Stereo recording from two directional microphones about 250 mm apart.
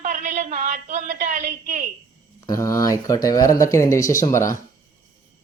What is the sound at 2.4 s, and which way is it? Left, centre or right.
Speech, centre.